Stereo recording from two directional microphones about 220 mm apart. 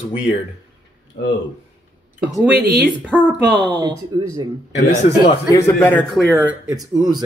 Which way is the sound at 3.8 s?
20° right (ahead or behind).